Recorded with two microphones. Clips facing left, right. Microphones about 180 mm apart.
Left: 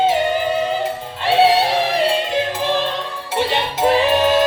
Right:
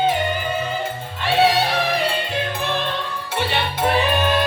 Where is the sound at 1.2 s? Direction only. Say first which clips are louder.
Left 3 dB; 30° left (ahead or behind).